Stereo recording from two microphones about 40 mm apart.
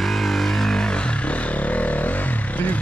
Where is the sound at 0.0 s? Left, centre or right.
Centre.